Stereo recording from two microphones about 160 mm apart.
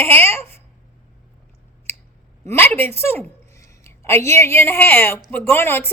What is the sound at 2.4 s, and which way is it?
A woman's voice, 15° left (ahead or behind).